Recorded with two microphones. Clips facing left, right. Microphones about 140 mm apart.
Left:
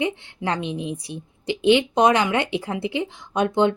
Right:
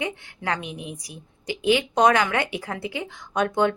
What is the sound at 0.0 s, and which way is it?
A woman's voice, 25° left (ahead or behind).